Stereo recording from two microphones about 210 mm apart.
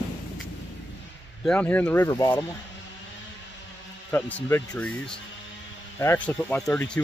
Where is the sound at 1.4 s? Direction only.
5° left (ahead or behind).